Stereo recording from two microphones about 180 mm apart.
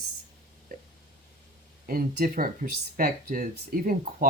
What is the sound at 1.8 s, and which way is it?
Speech, 50° right (ahead or behind).